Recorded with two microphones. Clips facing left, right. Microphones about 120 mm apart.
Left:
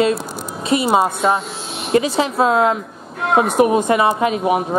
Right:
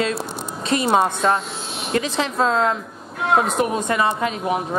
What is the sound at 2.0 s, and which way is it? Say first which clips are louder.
Speech: left 4 dB; 5° left (ahead or behind).